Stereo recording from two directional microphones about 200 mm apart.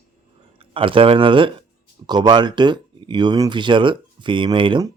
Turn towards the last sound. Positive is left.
turn(degrees=-20)  # may be behind; listen again after turning